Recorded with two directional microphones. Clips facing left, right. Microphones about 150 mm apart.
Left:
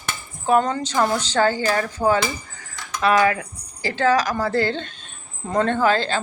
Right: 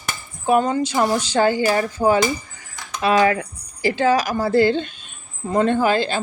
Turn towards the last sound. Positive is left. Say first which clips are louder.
# right 1 dB
turn(degrees=-15)  # may be behind; listen again after turning